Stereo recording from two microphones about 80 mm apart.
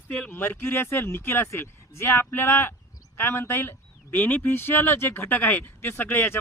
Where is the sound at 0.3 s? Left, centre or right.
Left.